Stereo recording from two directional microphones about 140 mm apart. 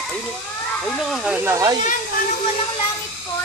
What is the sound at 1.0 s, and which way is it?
Speech, centre (ahead or behind).